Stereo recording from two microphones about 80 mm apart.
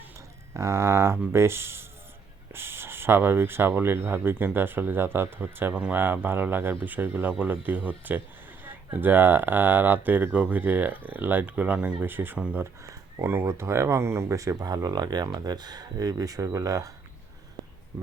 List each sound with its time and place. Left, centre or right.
0.5 s speech: right
12.8 s speech: right